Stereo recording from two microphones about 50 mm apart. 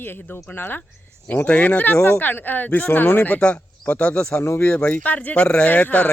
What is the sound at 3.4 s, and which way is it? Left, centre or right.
Speech, left.